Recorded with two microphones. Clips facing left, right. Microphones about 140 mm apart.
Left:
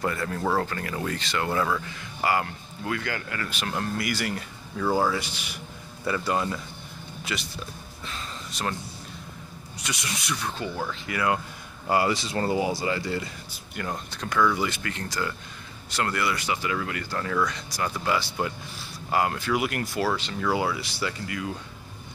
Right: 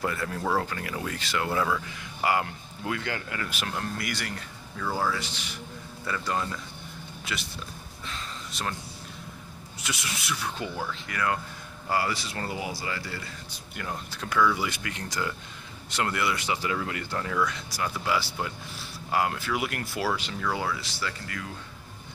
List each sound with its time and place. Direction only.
0.0 s speech: 5° right (ahead or behind)
2.2 s speech: 15° right (ahead or behind)
3.7 s speech: 5° left (ahead or behind)
4.9 s speech: 15° left (ahead or behind)
8.1 s a sound: centre (ahead or behind)
9.8 s speech: 5° right (ahead or behind)
11.1 s speech: 10° left (ahead or behind)
11.9 s speech: 20° left (ahead or behind)
13.7 s speech: centre (ahead or behind); by 17.2 s 20° right (ahead or behind)
17.5 s speech: 5° right (ahead or behind)
20.3 s speech: 10° left (ahead or behind)